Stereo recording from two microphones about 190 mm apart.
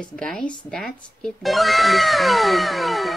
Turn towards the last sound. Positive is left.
turn(degrees=0)  # may be behind; listen again after turning